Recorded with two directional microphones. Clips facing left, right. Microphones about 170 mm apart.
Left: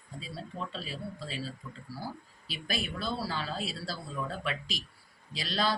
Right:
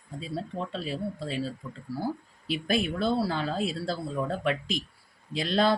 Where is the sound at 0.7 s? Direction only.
55° right (ahead or behind).